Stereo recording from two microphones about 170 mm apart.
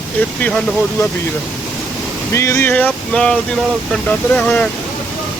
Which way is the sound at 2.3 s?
15° left (ahead or behind).